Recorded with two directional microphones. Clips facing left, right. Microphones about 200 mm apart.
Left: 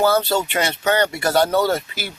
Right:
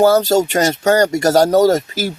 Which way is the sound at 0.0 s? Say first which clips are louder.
Right 6 dB; 40° right (ahead or behind).